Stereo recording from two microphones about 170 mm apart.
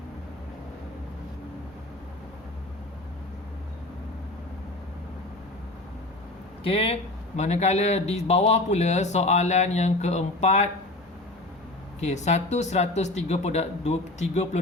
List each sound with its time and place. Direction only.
6.6 s speech: 35° left (ahead or behind)
11.9 s speech: 40° left (ahead or behind)